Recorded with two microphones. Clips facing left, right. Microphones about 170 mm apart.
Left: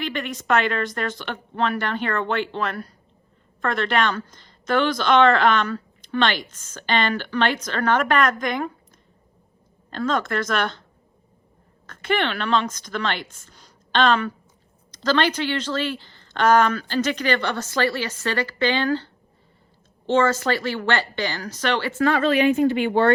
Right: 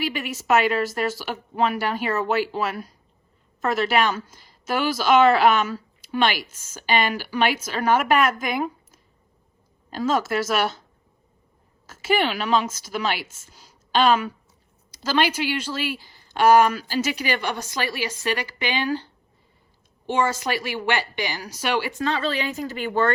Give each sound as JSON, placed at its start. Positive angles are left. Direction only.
{"t": 0.0, "sound": "a woman's voice", "side_deg": -5}
{"t": 11.9, "sound": "a woman's voice", "side_deg": -5}
{"t": 22.2, "sound": "a woman's voice", "side_deg": -35}